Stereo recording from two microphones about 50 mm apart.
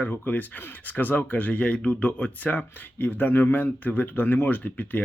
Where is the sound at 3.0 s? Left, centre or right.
Left.